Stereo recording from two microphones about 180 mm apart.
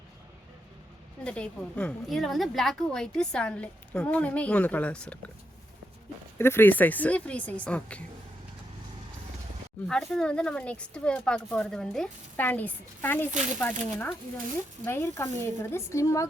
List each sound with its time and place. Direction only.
1.2 s a woman's voice: 5° left (ahead or behind)
6.4 s a woman's voice: 10° left (ahead or behind)
9.8 s a woman's voice: 5° left (ahead or behind)